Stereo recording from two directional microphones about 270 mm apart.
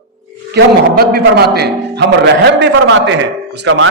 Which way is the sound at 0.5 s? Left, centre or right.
Right.